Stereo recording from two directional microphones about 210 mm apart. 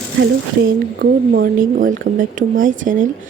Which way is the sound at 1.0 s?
45° right (ahead or behind).